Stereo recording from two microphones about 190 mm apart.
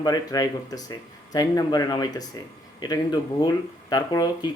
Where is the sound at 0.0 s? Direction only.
20° left (ahead or behind).